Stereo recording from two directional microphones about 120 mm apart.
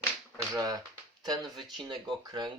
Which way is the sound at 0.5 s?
30° right (ahead or behind).